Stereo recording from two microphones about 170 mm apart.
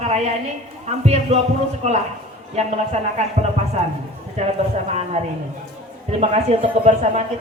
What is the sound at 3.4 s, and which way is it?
Speech, 45° right (ahead or behind).